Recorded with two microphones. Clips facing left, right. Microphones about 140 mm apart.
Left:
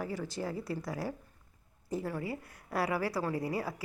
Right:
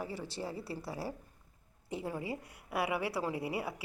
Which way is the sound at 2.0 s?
15° right (ahead or behind).